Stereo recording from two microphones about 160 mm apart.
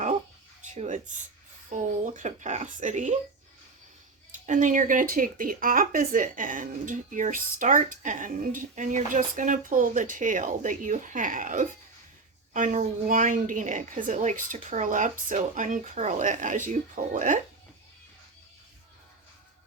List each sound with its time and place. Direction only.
0.7 s a woman's voice: 50° right (ahead or behind)
4.4 s a woman's voice: 55° right (ahead or behind)